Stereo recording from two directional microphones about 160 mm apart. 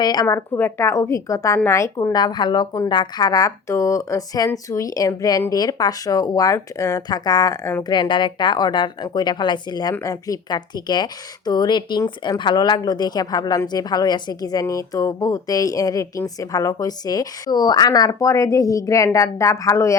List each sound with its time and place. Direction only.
0.0 s a woman's voice: 25° left (ahead or behind)
7.9 s a woman's voice: 30° left (ahead or behind)